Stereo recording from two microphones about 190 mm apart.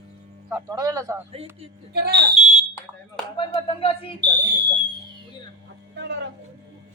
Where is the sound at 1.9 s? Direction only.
60° right (ahead or behind).